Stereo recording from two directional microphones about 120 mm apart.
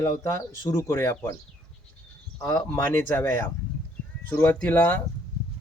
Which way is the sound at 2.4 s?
30° left (ahead or behind).